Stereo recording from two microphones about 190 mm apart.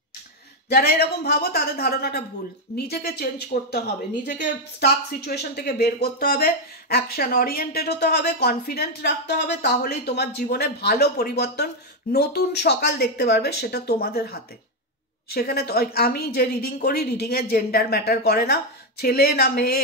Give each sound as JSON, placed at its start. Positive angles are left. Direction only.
{"t": 0.7, "sound": "speech", "side_deg": 55}